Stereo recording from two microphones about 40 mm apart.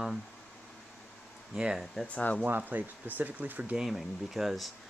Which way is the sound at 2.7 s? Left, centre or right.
Right.